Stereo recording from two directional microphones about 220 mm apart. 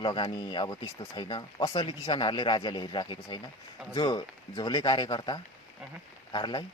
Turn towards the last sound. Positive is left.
turn(degrees=20)  # may be behind; listen again after turning